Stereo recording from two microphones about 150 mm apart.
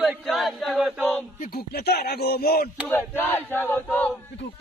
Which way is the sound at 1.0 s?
5° left (ahead or behind).